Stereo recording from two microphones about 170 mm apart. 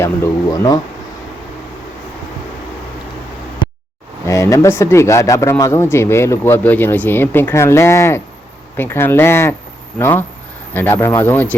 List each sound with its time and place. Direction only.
0.0 s speech: 15° left (ahead or behind)
4.3 s speech: 20° left (ahead or behind)